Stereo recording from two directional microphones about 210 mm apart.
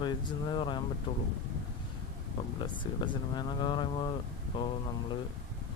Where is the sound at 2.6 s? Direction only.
20° left (ahead or behind).